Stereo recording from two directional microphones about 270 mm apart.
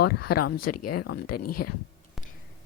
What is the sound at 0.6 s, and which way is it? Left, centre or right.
A woman's voice, left.